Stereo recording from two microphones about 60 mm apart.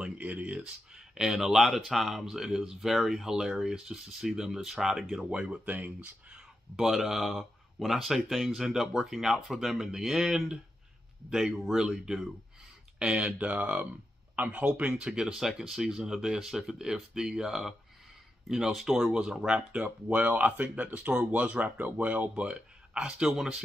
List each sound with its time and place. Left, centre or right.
0.0 s a sound: right
0.6 s speech: centre
5.7 s speech: right
6.3 s speech: centre
19.4 s speech: centre